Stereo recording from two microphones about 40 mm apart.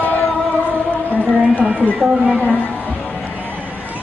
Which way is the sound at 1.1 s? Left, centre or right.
Right.